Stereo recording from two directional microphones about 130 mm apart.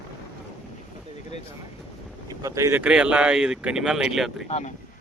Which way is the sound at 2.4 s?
25° right (ahead or behind).